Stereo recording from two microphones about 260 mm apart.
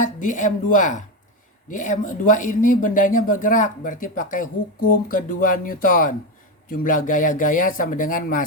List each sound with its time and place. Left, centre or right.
0.0 s speech: left